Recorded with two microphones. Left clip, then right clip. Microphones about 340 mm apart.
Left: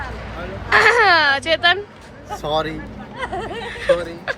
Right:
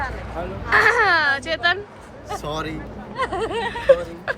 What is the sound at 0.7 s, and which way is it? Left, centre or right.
Speech, centre.